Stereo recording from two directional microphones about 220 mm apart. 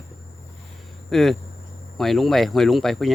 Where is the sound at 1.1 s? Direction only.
Centre (ahead or behind).